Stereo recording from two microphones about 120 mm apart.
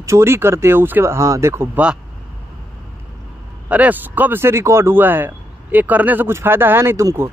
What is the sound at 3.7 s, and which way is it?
Speech, 15° right (ahead or behind).